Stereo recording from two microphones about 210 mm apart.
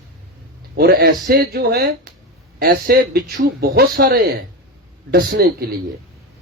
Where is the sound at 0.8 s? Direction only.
45° right (ahead or behind).